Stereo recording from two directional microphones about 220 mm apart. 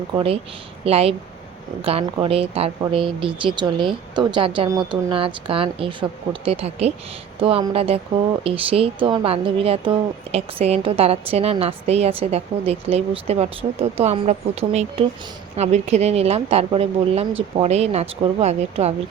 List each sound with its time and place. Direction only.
0.1 s speech: 25° right (ahead or behind)